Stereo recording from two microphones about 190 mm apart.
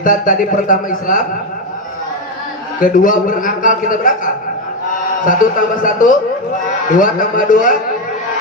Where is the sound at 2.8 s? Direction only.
45° left (ahead or behind).